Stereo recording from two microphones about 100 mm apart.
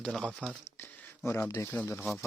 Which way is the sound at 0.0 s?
5° left (ahead or behind).